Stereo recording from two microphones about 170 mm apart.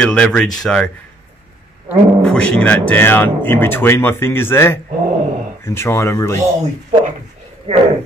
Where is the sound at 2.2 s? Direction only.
5° left (ahead or behind).